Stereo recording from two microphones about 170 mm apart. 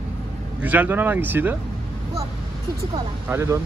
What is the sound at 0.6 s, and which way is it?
Speech, 10° right (ahead or behind).